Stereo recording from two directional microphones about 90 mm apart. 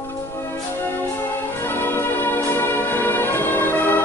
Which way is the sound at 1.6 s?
25° left (ahead or behind).